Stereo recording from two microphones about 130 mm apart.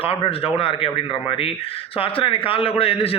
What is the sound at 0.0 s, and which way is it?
Speech, 45° left (ahead or behind).